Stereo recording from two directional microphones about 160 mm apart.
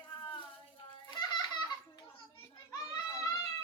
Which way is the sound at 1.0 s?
25° left (ahead or behind).